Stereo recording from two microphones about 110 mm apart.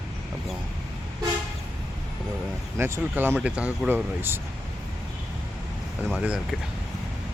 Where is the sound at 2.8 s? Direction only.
20° right (ahead or behind).